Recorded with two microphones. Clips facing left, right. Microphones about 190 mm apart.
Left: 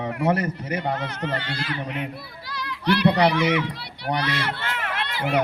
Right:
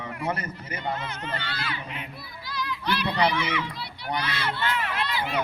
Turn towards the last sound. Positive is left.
turn(degrees=70)  # may be behind; listen again after turning